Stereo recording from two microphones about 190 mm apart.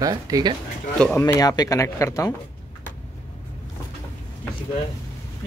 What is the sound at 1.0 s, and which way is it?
Speech, 10° left (ahead or behind).